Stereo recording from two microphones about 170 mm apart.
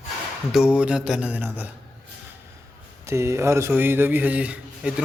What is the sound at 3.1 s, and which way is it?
A man's voice, 15° right (ahead or behind).